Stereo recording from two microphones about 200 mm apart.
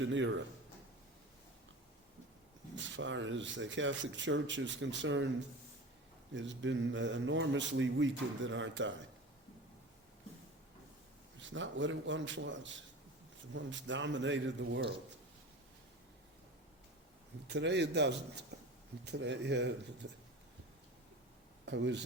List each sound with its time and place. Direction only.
0.0 s speech: 70° right (ahead or behind)
2.7 s speech: 65° right (ahead or behind)
6.3 s a man's voice: 65° right (ahead or behind)
11.3 s a man's voice: 65° right (ahead or behind)
17.5 s a man's voice: 60° right (ahead or behind)
21.7 s a man's voice: 60° right (ahead or behind)